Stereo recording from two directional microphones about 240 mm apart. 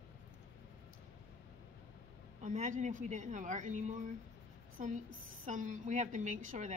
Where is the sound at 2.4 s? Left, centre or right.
Right.